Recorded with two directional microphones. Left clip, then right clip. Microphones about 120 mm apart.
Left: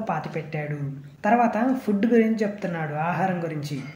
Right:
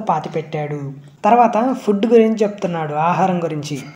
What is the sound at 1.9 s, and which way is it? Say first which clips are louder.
A woman's voice: right 10 dB; 15° right (ahead or behind).